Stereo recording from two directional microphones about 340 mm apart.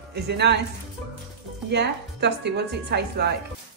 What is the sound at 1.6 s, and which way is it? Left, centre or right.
A woman's voice, right.